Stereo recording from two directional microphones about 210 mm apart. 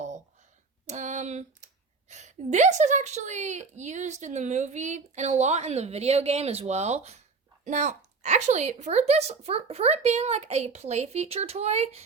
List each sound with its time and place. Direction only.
0.9 s a woman's voice: 35° right (ahead or behind)